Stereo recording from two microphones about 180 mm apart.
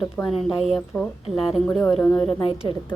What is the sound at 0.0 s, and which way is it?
A woman's voice, centre (ahead or behind).